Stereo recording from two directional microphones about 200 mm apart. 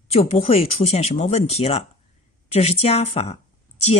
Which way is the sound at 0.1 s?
30° left (ahead or behind).